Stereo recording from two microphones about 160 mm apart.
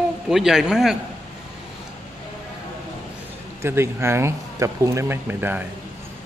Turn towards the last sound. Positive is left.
turn(degrees=-15)  # may be behind; listen again after turning